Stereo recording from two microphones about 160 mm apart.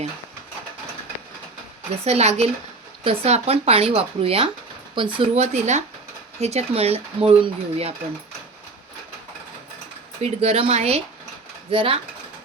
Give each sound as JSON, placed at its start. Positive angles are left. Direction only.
{"t": 2.0, "sound": "speech", "side_deg": -40}
{"t": 10.2, "sound": "speech", "side_deg": -40}